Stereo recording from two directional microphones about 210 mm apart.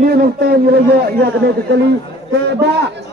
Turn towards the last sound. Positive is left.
turn(degrees=-55)  # may be behind; listen again after turning